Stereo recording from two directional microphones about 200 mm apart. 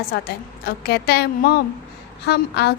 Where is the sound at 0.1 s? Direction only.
50° left (ahead or behind).